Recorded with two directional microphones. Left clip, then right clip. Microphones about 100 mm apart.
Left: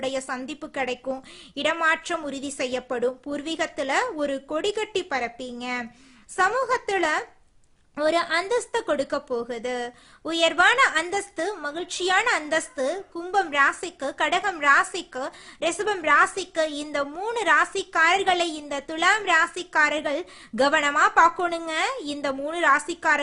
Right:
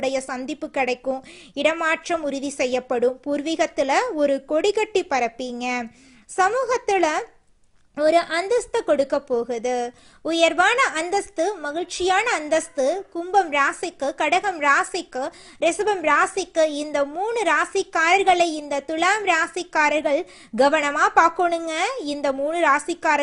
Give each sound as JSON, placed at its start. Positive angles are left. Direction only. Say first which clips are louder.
{"t": 0.0, "sound": "a woman's voice", "louder": "right 4 dB", "side_deg": -35}
{"t": 6.5, "sound": "a woman's voice", "louder": "right 3 dB", "side_deg": -30}
{"t": 7.9, "sound": "a woman's voice", "louder": "right 4 dB", "side_deg": -20}